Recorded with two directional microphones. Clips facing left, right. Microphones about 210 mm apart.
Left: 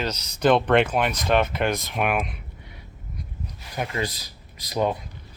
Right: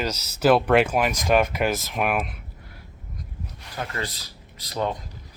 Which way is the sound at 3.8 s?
15° left (ahead or behind).